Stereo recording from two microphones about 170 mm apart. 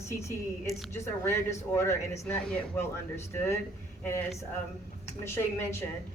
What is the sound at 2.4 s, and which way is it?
Speech, 5° left (ahead or behind).